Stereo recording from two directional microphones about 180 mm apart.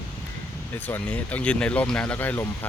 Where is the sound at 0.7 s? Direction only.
10° left (ahead or behind).